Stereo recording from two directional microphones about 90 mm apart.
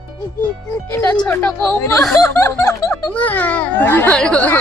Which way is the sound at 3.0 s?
20° left (ahead or behind).